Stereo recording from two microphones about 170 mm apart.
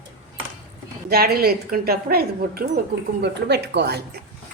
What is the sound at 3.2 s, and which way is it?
Speech, 80° right.